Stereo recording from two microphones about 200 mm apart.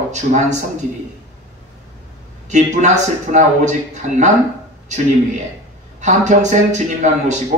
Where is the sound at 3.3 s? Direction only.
35° right (ahead or behind).